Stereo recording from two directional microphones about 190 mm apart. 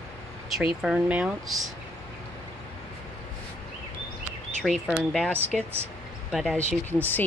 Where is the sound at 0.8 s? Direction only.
5° right (ahead or behind).